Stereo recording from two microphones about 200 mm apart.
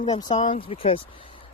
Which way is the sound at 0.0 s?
20° left (ahead or behind).